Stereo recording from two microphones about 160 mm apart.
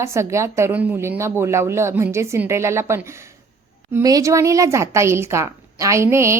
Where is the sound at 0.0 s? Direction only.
15° right (ahead or behind).